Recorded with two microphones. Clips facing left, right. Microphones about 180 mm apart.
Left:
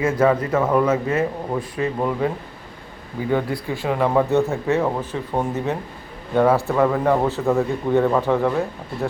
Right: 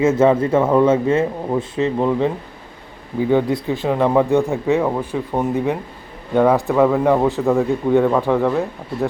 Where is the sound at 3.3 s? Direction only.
20° right (ahead or behind).